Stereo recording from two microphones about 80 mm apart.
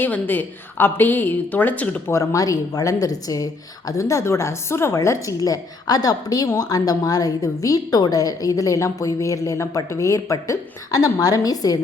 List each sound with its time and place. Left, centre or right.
0.0 s a woman's voice: left
2.0 s a woman's voice: left
5.4 s a woman's voice: left